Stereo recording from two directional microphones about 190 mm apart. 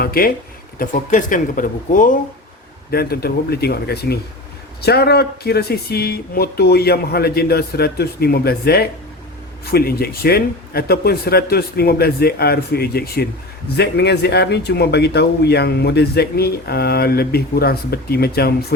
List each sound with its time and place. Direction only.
0.0 s speech: 50° left (ahead or behind)